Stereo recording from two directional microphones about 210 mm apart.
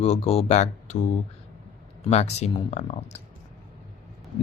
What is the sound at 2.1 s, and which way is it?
Speech, 30° left (ahead or behind).